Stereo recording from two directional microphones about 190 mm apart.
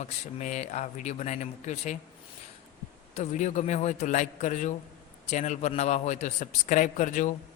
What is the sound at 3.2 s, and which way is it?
A man's voice, 40° left (ahead or behind).